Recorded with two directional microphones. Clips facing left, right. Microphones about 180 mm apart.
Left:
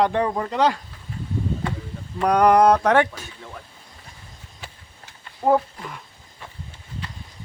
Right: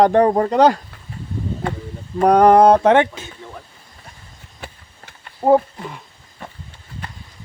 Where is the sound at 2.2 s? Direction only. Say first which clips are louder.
Right 5 dB; 30° right (ahead or behind).